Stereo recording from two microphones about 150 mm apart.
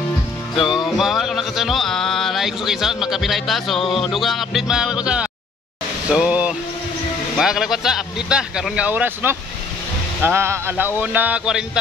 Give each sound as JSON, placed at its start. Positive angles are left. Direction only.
{"t": 0.6, "sound": "music", "side_deg": 0}
{"t": 6.0, "sound": "speech", "side_deg": -5}
{"t": 7.3, "sound": "music", "side_deg": -5}
{"t": 10.2, "sound": "speech", "side_deg": -15}